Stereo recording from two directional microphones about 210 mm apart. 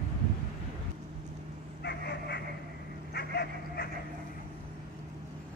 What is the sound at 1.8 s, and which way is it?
Dog, 55° left (ahead or behind).